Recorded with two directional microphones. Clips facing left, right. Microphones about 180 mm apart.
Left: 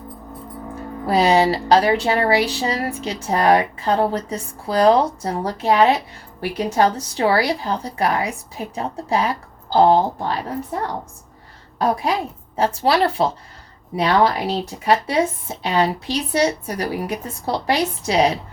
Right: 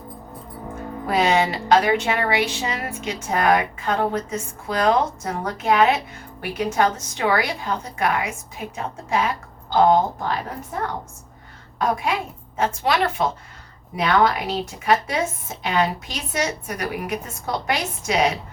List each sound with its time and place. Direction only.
1.0 s speech: 35° left (ahead or behind)
11.8 s speech: 35° left (ahead or behind)